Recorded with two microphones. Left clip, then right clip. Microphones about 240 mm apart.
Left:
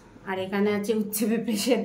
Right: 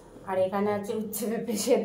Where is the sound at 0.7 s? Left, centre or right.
Left.